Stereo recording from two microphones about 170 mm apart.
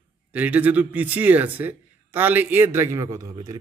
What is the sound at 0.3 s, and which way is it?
A man's voice, 10° right (ahead or behind).